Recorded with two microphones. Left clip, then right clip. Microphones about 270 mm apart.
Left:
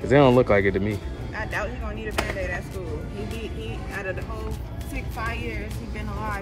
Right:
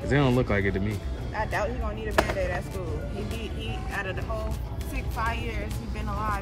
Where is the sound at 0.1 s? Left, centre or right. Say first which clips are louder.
Left 8 dB; centre.